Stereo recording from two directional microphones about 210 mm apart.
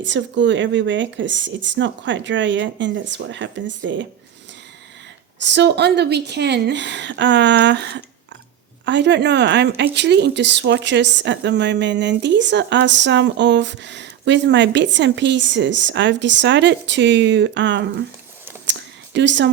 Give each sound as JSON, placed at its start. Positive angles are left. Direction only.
{"t": 0.0, "sound": "speech", "side_deg": -60}
{"t": 5.4, "sound": "speech", "side_deg": -55}
{"t": 18.6, "sound": "a sound", "side_deg": -60}